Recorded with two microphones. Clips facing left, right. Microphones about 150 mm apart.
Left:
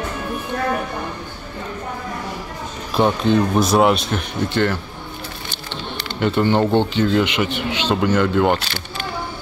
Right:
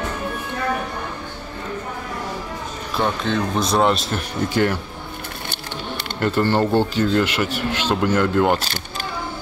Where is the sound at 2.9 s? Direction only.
20° left (ahead or behind).